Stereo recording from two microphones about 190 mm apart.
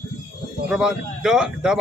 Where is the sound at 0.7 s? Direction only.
5° right (ahead or behind).